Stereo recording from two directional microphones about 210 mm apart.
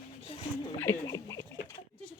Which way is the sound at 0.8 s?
15° left (ahead or behind).